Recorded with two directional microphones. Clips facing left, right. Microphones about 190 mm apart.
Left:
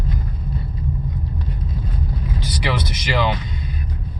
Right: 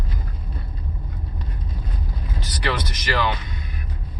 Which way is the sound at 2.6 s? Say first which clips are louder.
Even; 15° left (ahead or behind).